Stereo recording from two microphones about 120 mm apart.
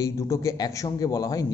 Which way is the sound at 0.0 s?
25° left (ahead or behind).